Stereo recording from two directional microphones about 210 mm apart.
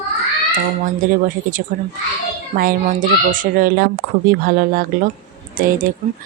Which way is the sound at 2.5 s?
40° right (ahead or behind).